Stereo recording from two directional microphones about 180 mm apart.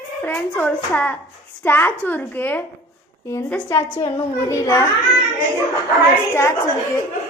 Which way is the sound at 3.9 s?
15° left (ahead or behind).